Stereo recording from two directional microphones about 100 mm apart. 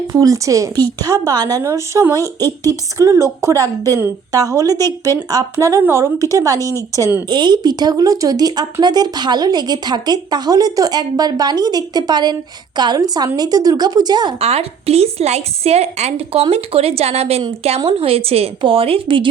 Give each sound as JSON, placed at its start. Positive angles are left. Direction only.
{"t": 0.1, "sound": "speech", "side_deg": -35}
{"t": 2.2, "sound": "speech", "side_deg": 25}
{"t": 3.0, "sound": "speech", "side_deg": -30}
{"t": 7.3, "sound": "speech", "side_deg": -50}
{"t": 14.3, "sound": "a woman's voice", "side_deg": -90}
{"t": 17.7, "sound": "a woman's voice", "side_deg": -65}